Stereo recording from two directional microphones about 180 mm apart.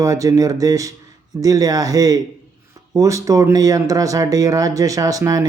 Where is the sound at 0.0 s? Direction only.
20° right (ahead or behind).